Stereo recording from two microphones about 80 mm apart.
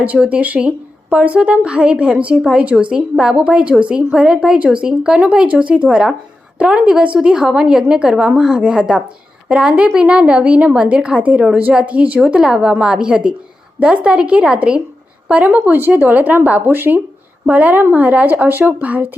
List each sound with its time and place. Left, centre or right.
0.0 s a woman's voice: centre